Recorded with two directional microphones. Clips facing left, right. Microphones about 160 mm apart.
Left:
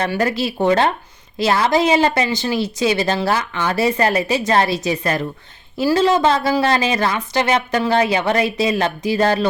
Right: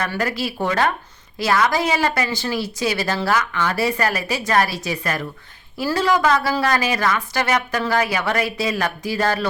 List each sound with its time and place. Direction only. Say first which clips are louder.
0.2 s speech: left 4 dB; 25° left (ahead or behind)